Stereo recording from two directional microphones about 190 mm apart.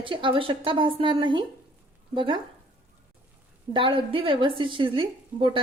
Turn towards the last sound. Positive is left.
turn(degrees=-25)  # may be behind; listen again after turning